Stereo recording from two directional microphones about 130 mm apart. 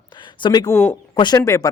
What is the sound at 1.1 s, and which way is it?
Speech, 35° left (ahead or behind).